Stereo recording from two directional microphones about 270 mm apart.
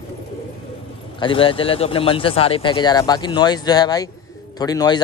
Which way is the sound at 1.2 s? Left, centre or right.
Centre.